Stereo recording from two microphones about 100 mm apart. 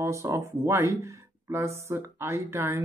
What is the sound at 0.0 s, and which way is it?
Speech, 30° right (ahead or behind).